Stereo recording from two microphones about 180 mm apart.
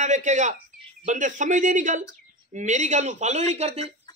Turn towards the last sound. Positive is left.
turn(degrees=-35)  # may be behind; listen again after turning